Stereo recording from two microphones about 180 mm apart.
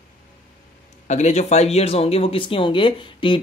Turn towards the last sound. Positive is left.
turn(degrees=30)  # may be behind; listen again after turning